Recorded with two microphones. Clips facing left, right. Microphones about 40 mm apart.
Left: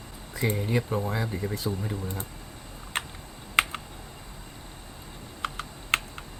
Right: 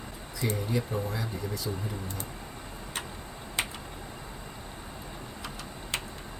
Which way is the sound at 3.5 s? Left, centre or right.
Left.